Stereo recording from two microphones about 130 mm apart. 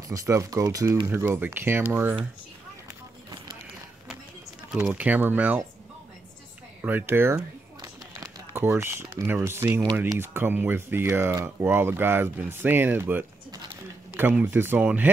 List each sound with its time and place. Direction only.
0.1 s speech: 25° right (ahead or behind)
4.8 s speech: 10° right (ahead or behind)
6.8 s speech: 15° right (ahead or behind)